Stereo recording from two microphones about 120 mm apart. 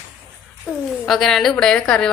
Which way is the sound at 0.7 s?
Centre (ahead or behind).